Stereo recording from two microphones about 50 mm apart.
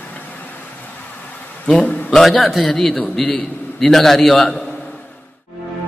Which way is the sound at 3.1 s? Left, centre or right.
Left.